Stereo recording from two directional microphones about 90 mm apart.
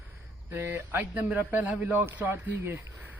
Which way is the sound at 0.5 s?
25° right (ahead or behind).